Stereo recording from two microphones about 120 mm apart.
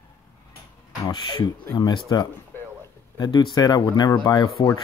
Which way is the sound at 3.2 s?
35° left (ahead or behind).